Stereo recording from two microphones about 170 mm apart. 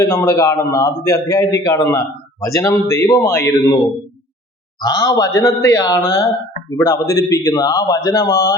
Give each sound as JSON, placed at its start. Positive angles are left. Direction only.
{"t": 0.0, "sound": "a man's voice", "side_deg": 15}
{"t": 4.8, "sound": "a man's voice", "side_deg": 25}